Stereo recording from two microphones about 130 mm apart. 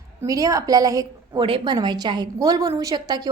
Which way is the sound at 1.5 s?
40° right (ahead or behind).